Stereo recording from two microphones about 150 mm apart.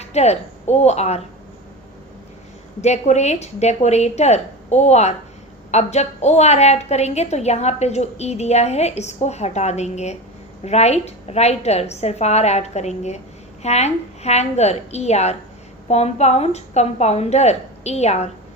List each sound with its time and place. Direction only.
0.0 s a woman's voice: 45° left (ahead or behind)
2.8 s a woman's voice: 50° left (ahead or behind)